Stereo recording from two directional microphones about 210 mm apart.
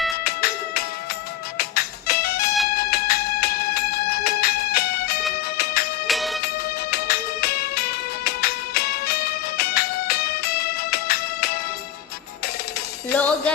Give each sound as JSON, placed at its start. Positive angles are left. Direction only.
{"t": 0.3, "sound": "music", "side_deg": 50}
{"t": 6.1, "sound": "music", "side_deg": 0}
{"t": 6.9, "sound": "music", "side_deg": 50}
{"t": 13.1, "sound": "music", "side_deg": 5}